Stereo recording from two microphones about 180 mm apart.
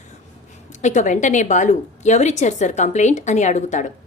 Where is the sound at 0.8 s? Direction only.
45° left (ahead or behind).